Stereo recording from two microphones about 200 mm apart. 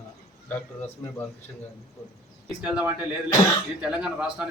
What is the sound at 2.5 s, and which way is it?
A man's voice, 5° right (ahead or behind).